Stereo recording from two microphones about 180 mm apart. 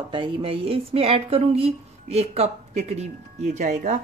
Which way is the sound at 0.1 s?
30° right (ahead or behind).